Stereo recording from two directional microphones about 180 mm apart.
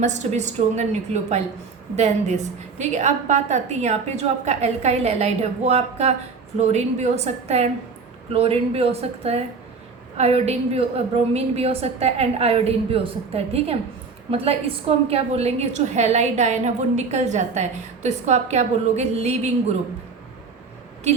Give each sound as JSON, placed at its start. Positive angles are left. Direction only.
{"t": 0.0, "sound": "a woman's voice", "side_deg": -40}